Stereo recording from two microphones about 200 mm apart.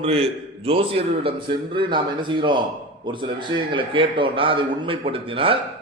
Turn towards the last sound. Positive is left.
turn(degrees=-25)  # may be behind; listen again after turning